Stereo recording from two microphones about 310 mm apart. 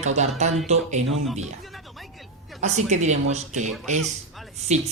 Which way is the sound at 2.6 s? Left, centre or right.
Right.